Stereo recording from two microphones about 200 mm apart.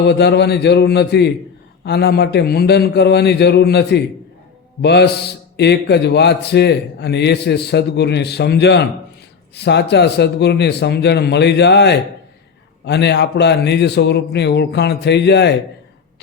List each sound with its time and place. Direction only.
0.0 s a man's voice: 55° left (ahead or behind)